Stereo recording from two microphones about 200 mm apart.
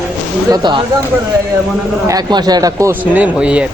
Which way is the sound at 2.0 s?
20° right (ahead or behind).